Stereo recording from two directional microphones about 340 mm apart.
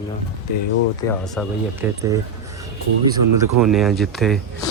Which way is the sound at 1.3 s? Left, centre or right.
Centre.